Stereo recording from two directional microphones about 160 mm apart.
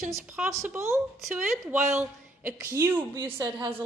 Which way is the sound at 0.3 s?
10° right (ahead or behind).